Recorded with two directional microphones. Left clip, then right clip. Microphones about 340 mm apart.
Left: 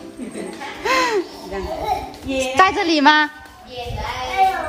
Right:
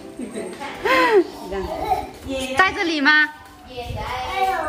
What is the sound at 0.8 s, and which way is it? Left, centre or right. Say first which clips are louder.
Hoot: right 2 dB; centre.